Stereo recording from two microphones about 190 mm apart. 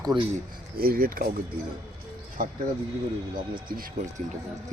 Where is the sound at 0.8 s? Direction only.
50° right (ahead or behind).